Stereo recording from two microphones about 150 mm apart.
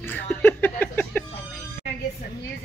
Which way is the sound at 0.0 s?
15° left (ahead or behind).